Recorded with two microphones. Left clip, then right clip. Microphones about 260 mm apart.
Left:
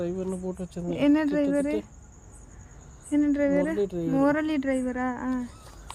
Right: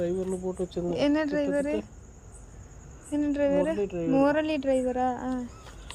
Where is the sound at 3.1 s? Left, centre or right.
Centre.